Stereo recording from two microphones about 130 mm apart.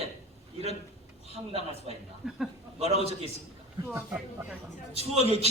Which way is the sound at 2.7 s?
55° right (ahead or behind).